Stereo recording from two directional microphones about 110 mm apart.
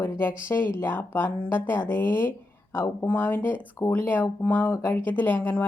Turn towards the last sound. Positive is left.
turn(degrees=15)  # may be behind; listen again after turning